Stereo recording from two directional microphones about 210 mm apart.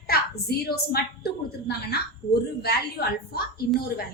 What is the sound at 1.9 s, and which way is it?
A woman's voice, 50° left (ahead or behind).